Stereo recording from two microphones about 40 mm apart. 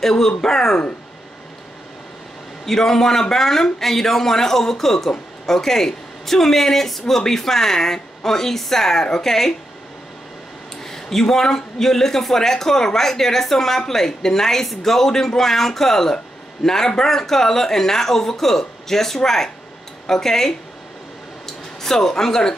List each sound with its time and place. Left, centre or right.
0.0 s speech: centre
2.6 s speech: centre
10.8 s speech: centre